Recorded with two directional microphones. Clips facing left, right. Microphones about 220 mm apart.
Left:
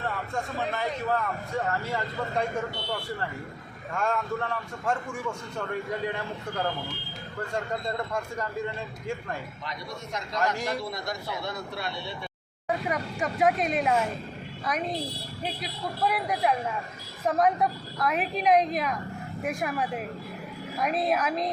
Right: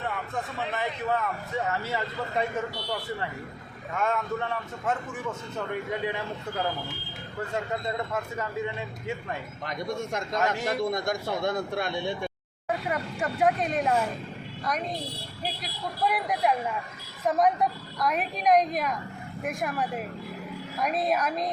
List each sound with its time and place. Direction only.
0.3 s a man's voice: centre (ahead or behind)
3.9 s a man's voice: centre (ahead or behind)
7.5 s a man's voice: 5° right (ahead or behind)
9.6 s a man's voice: 50° right (ahead or behind)
12.6 s a man's voice: centre (ahead or behind)
16.0 s a man's voice: centre (ahead or behind)